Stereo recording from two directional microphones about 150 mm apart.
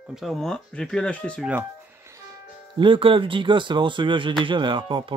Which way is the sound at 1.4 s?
10° right (ahead or behind).